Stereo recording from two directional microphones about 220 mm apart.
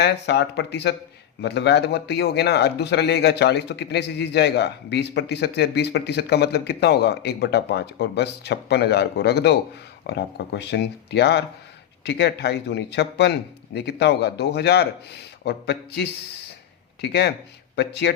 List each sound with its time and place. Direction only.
0.0 s a man's voice: 50° left (ahead or behind)